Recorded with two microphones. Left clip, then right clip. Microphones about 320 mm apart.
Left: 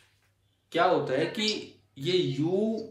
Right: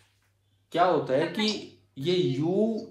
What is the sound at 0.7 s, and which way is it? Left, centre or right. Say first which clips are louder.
Speech: right 1 dB; centre.